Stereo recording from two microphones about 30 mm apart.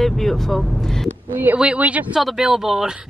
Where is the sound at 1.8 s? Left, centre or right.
Right.